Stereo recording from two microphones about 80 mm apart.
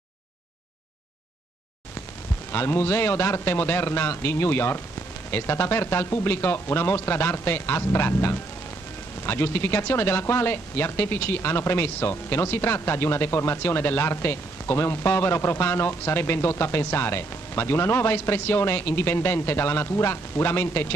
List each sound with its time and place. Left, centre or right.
2.5 s a man's voice: left